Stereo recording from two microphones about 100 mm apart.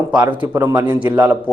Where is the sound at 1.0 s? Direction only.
20° right (ahead or behind).